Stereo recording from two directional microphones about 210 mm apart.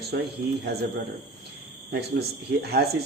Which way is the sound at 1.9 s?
50° right (ahead or behind).